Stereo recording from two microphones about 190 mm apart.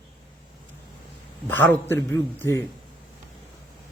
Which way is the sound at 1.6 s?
10° left (ahead or behind).